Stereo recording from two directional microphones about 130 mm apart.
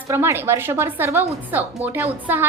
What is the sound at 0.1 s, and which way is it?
A woman's voice, 20° right (ahead or behind).